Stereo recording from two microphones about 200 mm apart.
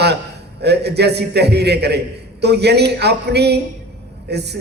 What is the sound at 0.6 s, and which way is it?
A man's voice, 55° right (ahead or behind).